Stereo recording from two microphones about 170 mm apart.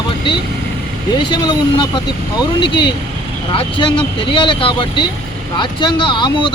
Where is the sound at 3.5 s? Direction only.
30° left (ahead or behind).